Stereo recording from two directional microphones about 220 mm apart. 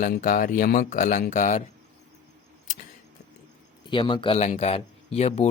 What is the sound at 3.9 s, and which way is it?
Speech, 25° left (ahead or behind).